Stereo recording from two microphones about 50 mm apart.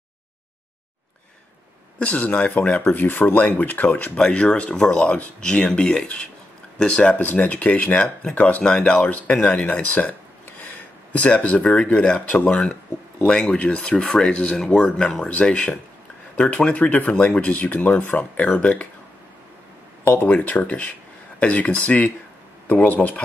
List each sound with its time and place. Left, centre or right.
2.0 s speech: left
2.9 s speech: left; by 6.2 s centre
7.3 s speech: left
8.6 s speech: centre; by 10.1 s left
10.6 s a sound: left
11.7 s speech: left
20.2 s speech: left